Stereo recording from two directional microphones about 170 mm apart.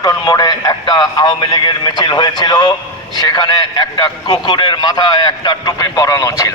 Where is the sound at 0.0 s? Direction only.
20° left (ahead or behind).